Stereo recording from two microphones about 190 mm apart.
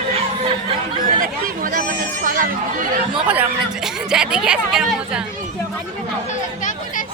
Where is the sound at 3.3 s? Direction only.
5° right (ahead or behind).